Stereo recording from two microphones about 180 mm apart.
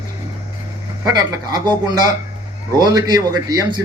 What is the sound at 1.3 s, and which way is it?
A man's voice, 20° right (ahead or behind).